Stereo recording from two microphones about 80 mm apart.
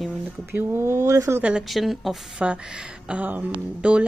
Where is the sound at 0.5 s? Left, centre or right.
Right.